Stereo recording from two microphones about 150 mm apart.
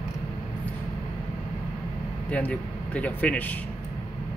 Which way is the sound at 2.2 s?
10° left (ahead or behind).